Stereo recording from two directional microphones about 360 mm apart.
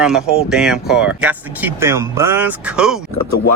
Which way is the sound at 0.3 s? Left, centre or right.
Centre.